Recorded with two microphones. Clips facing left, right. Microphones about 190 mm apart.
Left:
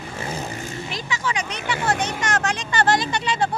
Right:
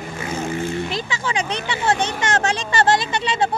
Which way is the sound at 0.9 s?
30° right (ahead or behind).